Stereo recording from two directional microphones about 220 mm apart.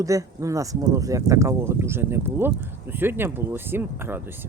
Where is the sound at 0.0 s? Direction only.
15° right (ahead or behind).